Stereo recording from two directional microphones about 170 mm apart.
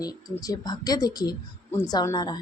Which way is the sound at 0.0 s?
20° left (ahead or behind).